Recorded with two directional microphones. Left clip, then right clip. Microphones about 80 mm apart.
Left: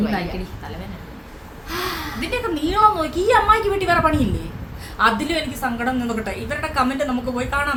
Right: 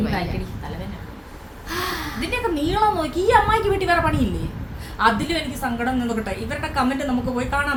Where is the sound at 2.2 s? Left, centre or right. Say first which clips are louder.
Even; left.